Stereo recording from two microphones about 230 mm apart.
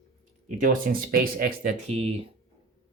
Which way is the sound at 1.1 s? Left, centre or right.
Right.